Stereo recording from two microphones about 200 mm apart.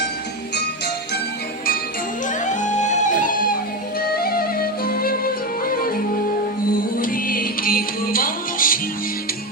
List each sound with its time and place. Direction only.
2.2 s music: 40° left (ahead or behind)
7.0 s music: 45° left (ahead or behind)